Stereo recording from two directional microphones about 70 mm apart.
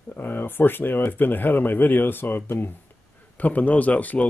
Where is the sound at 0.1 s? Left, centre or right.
Left.